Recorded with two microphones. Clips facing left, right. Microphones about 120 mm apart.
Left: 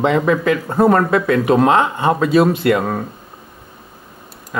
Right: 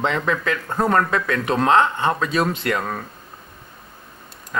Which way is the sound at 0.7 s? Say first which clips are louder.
Left 5 dB; 30° left (ahead or behind).